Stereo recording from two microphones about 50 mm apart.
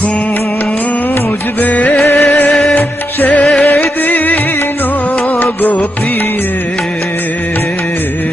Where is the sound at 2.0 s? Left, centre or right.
Left.